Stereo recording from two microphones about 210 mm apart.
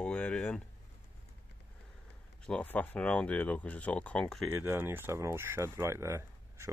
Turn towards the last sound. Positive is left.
turn(degrees=-15)  # may be behind; listen again after turning